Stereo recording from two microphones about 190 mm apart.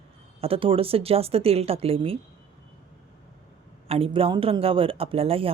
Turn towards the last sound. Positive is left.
turn(degrees=-30)  # may be behind; listen again after turning